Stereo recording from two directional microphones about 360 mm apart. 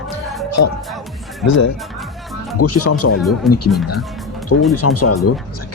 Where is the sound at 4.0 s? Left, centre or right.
Centre.